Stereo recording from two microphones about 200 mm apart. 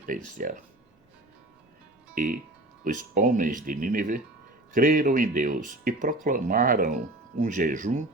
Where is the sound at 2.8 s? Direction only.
40° right (ahead or behind).